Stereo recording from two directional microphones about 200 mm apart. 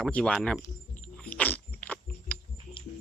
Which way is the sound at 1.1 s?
10° left (ahead or behind).